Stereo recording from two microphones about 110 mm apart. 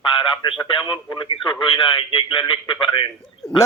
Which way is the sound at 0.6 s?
40° left (ahead or behind).